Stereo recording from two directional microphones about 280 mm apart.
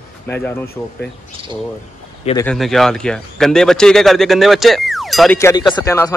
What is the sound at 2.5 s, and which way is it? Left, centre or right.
Speech, centre.